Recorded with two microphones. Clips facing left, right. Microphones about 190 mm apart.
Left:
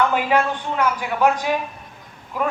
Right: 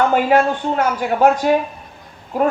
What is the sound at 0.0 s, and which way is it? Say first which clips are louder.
A man's voice: right 5 dB; 45° right (ahead or behind).